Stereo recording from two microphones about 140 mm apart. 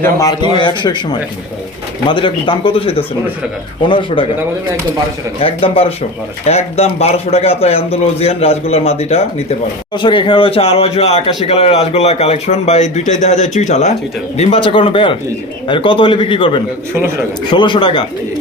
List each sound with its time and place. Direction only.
0.0 s a man's voice: 25° left (ahead or behind)
2.0 s a man's voice: 35° left (ahead or behind)
5.4 s a man's voice: 45° left (ahead or behind)
14.3 s a man's voice: 40° left (ahead or behind)